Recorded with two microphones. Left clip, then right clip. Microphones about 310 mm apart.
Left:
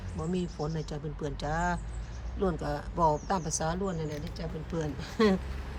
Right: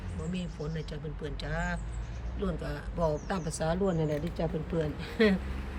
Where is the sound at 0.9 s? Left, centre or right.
Centre.